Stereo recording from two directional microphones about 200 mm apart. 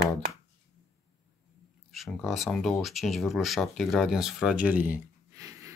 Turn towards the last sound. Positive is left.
turn(degrees=-15)  # may be behind; listen again after turning